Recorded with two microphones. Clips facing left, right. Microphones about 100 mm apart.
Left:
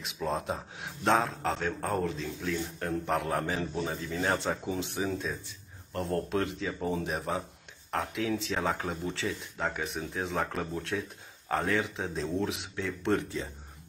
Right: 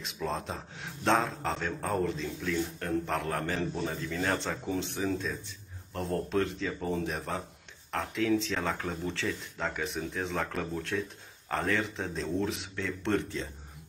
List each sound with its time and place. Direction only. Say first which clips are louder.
0.0 s speech: left 2 dB; 5° left (ahead or behind)